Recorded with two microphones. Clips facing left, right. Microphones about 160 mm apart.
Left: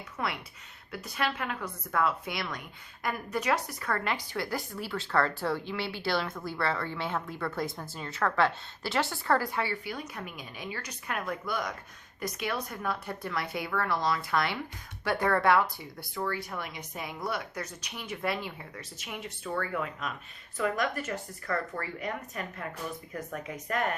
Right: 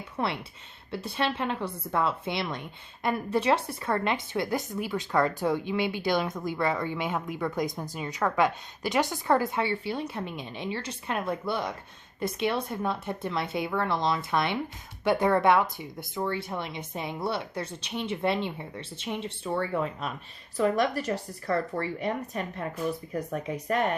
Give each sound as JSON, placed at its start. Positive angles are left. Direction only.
{"t": 0.2, "sound": "a woman's voice", "side_deg": -30}